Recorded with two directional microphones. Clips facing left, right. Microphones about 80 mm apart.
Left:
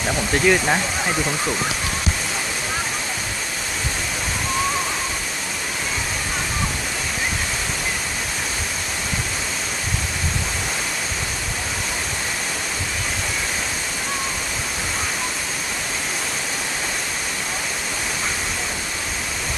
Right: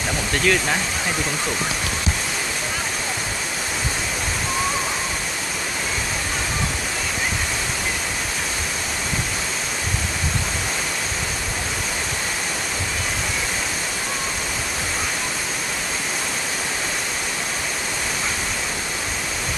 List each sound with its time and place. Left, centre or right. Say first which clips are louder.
0.4 s speech: left 2 dB; centre